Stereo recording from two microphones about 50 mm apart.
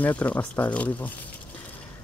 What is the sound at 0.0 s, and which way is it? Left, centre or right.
Speech, left.